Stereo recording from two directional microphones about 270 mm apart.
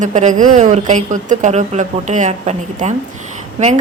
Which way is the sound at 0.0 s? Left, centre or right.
Right.